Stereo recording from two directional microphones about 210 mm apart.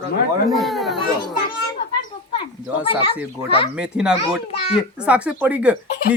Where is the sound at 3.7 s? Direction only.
5° right (ahead or behind).